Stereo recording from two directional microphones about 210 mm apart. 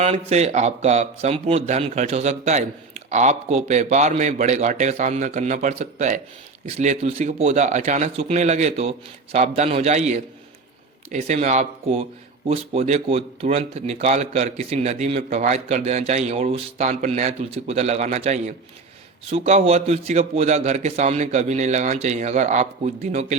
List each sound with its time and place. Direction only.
0.0 s speech: 30° right (ahead or behind)